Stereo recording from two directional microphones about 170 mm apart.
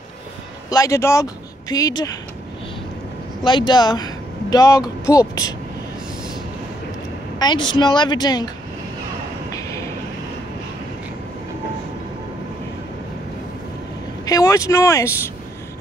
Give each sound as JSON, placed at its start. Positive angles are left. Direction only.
{"t": 0.7, "sound": "speech", "side_deg": 20}
{"t": 3.4, "sound": "a woman's voice", "side_deg": 25}
{"t": 7.3, "sound": "a woman's voice", "side_deg": 25}
{"t": 14.2, "sound": "speech", "side_deg": 20}